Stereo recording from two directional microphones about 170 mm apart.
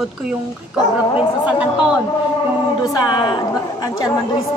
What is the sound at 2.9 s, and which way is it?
A woman's voice, 25° left (ahead or behind).